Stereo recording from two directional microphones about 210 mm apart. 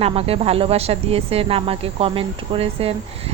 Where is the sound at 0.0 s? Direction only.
30° right (ahead or behind).